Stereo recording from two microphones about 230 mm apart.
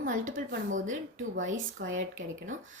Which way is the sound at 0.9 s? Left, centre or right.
Right.